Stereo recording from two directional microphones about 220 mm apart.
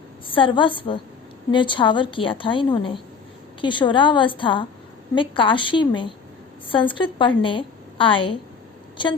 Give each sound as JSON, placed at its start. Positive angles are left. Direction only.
{"t": 0.3, "sound": "a woman's voice", "side_deg": 25}